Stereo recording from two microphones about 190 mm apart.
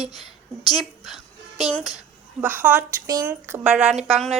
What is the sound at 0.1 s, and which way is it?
Speech, 20° left (ahead or behind).